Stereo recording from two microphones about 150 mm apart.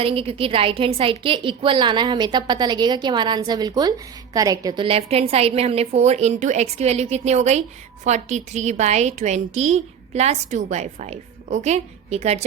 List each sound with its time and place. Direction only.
0.0 s a woman's voice: 40° right (ahead or behind); by 4.7 s 25° right (ahead or behind)
4.8 s a woman's voice: 40° right (ahead or behind)